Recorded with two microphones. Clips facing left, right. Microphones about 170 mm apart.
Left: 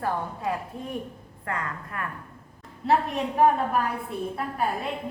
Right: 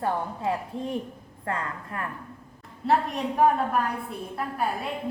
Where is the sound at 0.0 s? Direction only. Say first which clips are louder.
Right 1 dB; 25° right (ahead or behind).